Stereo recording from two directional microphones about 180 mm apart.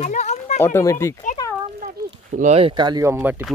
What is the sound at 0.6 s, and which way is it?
Speech, 15° left (ahead or behind).